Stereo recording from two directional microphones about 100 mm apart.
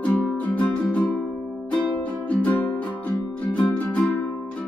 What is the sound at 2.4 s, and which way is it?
Music, 15° left (ahead or behind).